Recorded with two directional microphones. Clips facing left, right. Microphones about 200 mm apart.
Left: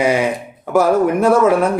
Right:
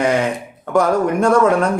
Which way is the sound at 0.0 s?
10° left (ahead or behind).